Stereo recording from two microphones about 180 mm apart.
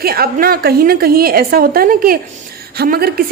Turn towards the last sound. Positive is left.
turn(degrees=-55)  # may be behind; listen again after turning